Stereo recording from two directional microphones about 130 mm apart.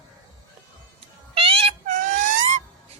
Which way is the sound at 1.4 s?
45° right (ahead or behind).